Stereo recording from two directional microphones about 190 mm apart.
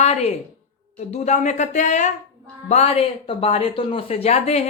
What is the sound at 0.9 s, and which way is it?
Speech, 35° left (ahead or behind).